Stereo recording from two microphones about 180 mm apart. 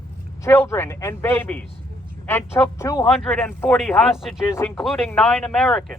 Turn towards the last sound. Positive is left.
turn(degrees=5)  # may be behind; listen again after turning